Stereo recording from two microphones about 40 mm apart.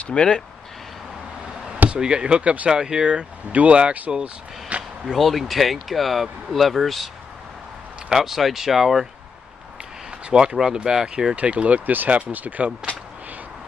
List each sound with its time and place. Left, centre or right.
0.1 s speech: left
1.9 s speech: right
2.4 s speech: right
2.7 s speech: centre
5.0 s speech: centre
8.1 s speech: centre
10.3 s speech: centre
11.3 s speech: right
11.8 s speech: right